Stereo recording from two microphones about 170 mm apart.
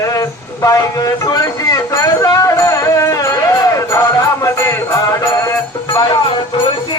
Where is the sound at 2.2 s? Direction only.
20° left (ahead or behind).